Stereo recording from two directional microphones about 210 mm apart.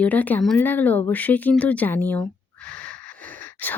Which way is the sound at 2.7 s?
5° left (ahead or behind).